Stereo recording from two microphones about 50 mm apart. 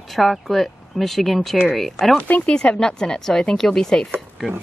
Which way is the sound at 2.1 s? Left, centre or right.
Left.